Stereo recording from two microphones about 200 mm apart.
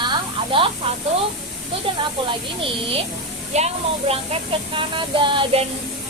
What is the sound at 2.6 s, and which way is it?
Music, 25° right (ahead or behind).